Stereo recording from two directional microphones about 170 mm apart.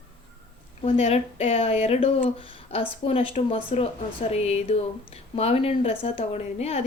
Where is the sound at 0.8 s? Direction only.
35° left (ahead or behind).